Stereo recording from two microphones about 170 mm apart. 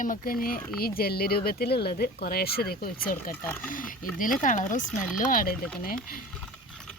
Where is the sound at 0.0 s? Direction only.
55° left (ahead or behind).